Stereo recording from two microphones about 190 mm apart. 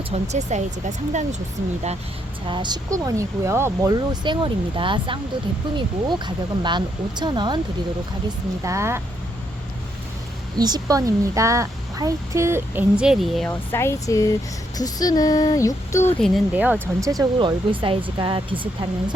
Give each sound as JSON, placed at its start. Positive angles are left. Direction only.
{"t": 0.1, "sound": "speech", "side_deg": -35}
{"t": 2.5, "sound": "speech", "side_deg": -25}
{"t": 8.6, "sound": "speech", "side_deg": -15}
{"t": 10.6, "sound": "speech", "side_deg": -20}
{"t": 16.2, "sound": "speech", "side_deg": -5}